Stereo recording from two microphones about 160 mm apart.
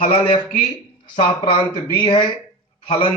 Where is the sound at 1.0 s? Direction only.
30° left (ahead or behind).